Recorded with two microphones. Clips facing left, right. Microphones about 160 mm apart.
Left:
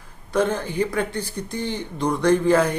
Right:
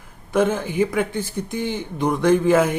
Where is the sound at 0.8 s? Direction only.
5° right (ahead or behind).